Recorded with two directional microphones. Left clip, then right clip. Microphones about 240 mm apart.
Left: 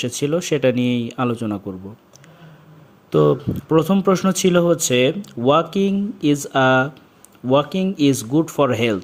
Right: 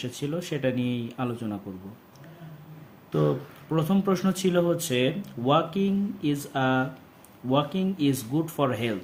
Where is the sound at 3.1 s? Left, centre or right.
Left.